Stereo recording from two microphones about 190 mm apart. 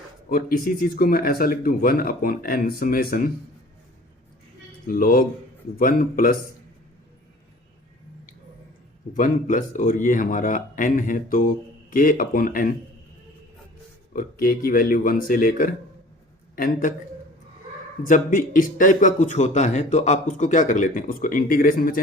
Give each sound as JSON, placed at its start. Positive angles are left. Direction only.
{"t": 0.3, "sound": "a man's voice", "side_deg": 45}
{"t": 4.9, "sound": "a man's voice", "side_deg": 50}
{"t": 9.1, "sound": "a man's voice", "side_deg": 45}
{"t": 14.1, "sound": "a man's voice", "side_deg": 50}
{"t": 18.0, "sound": "a man's voice", "side_deg": 45}